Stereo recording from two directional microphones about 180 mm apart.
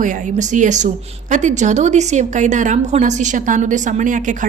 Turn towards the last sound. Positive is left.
turn(degrees=-45)  # may be behind; listen again after turning